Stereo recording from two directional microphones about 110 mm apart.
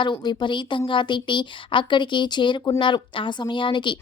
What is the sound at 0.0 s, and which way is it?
Speech, 45° left (ahead or behind).